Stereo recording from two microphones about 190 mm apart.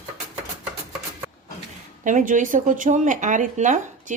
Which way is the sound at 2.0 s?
45° right (ahead or behind).